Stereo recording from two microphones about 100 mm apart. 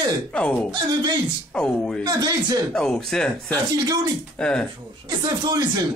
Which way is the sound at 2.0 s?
45° right (ahead or behind).